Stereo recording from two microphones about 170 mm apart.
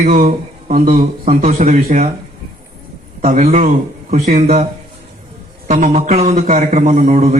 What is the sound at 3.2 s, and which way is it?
Speech, 50° right (ahead or behind).